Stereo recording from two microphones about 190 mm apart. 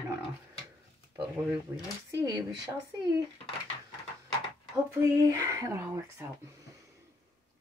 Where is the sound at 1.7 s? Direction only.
10° right (ahead or behind).